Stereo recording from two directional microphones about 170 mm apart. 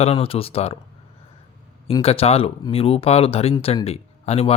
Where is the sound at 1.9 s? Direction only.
35° left (ahead or behind).